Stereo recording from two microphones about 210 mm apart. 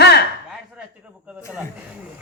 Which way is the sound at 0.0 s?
55° left (ahead or behind).